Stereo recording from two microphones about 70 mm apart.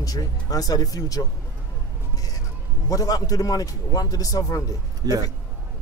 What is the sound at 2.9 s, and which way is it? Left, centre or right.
Speech, left.